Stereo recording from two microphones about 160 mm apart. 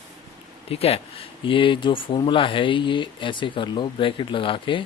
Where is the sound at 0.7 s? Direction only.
40° left (ahead or behind).